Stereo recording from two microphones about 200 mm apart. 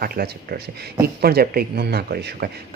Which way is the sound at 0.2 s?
45° right (ahead or behind).